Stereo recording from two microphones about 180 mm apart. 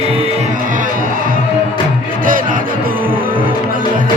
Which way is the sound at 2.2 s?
50° right (ahead or behind).